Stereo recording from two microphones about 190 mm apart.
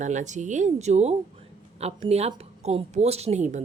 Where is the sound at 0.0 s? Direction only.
40° right (ahead or behind).